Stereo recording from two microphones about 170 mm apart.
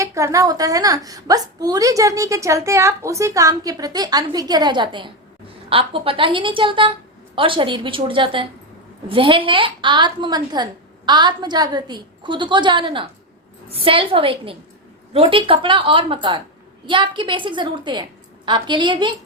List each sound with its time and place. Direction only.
0.0 s a woman's voice: 20° right (ahead or behind)